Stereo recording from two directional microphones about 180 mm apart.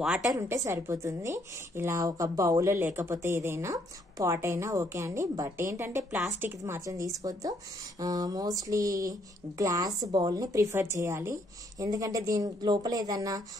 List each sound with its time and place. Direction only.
0.0 s a woman's voice: centre (ahead or behind)
0.4 s a woman's voice: 15° right (ahead or behind)